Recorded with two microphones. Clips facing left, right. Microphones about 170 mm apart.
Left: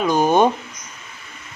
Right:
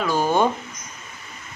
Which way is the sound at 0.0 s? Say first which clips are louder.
Left 4 dB; 20° left (ahead or behind).